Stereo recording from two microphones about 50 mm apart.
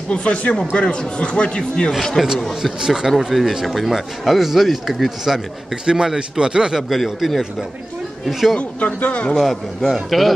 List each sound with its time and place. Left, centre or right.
0.1 s speech: left
2.2 s speech: centre
5.9 s speech: centre
6.9 s speech: centre
8.5 s speech: left
9.4 s speech: centre